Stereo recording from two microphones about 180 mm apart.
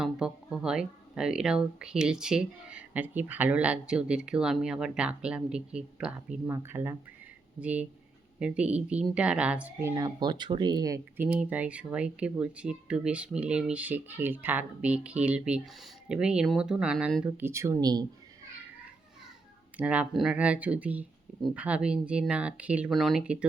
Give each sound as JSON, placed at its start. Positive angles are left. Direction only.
{"t": 0.0, "sound": "speech", "side_deg": -5}
{"t": 9.9, "sound": "speech", "side_deg": -20}
{"t": 11.3, "sound": "speech", "side_deg": -10}
{"t": 17.2, "sound": "speech", "side_deg": -15}
{"t": 19.7, "sound": "speech", "side_deg": -10}